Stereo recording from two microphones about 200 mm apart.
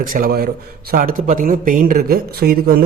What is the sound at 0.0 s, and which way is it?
A man's voice, 45° right (ahead or behind).